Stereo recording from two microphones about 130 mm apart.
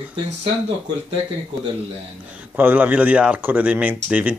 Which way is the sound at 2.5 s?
15° right (ahead or behind).